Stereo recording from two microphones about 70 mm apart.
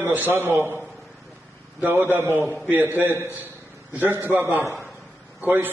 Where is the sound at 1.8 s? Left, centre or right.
Right.